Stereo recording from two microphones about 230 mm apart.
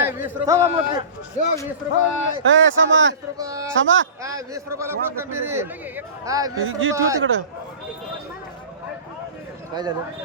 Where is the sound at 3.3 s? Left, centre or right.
Centre.